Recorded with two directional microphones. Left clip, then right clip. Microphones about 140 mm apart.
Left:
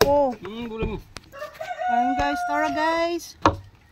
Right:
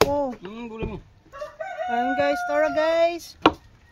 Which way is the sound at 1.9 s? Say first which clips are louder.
Left 1 dB; 35° right (ahead or behind).